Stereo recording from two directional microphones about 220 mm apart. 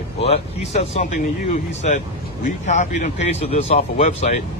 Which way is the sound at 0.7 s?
35° left (ahead or behind).